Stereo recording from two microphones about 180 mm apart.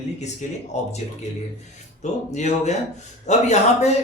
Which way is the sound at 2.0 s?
40° left (ahead or behind).